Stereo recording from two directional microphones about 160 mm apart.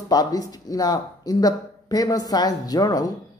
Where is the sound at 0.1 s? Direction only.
25° left (ahead or behind).